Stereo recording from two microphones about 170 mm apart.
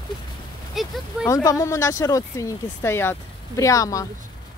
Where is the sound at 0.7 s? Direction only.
Centre (ahead or behind).